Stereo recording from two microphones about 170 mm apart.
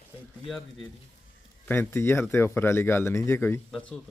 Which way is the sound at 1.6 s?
10° left (ahead or behind).